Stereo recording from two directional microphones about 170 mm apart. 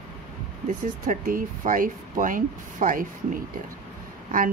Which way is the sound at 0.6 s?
50° right (ahead or behind).